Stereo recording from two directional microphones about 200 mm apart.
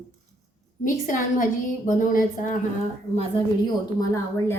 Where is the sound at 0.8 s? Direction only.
40° left (ahead or behind).